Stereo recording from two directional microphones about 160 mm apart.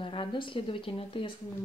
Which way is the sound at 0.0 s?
30° left (ahead or behind).